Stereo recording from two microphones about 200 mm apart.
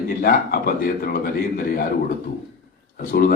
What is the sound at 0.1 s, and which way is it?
A man's voice, 50° left (ahead or behind).